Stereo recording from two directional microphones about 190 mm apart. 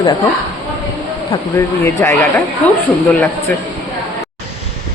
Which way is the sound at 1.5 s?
15° left (ahead or behind).